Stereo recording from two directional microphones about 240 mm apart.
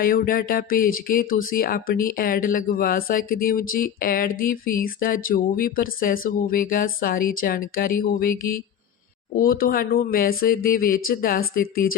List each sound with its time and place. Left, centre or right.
0.0 s speech: left